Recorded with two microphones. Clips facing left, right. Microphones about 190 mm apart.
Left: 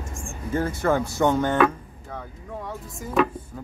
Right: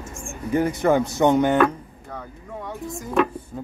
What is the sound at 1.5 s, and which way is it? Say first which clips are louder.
Speech: right 1 dB; centre (ahead or behind).